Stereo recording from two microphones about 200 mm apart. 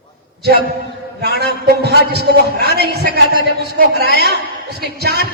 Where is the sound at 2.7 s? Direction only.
50° right (ahead or behind).